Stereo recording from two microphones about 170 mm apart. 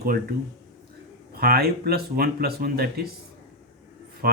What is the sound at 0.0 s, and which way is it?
Speech, 65° right (ahead or behind).